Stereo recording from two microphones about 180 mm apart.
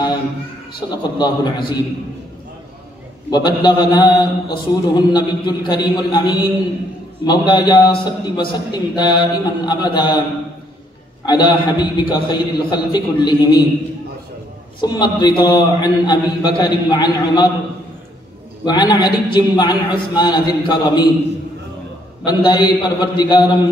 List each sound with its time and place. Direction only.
0.7 s a man's voice: 25° left (ahead or behind)
3.3 s a man's voice: 25° left (ahead or behind)
11.2 s a man's voice: 25° left (ahead or behind)
14.8 s a man's voice: 25° left (ahead or behind)
18.7 s a man's voice: 25° left (ahead or behind)
22.2 s a man's voice: 25° left (ahead or behind)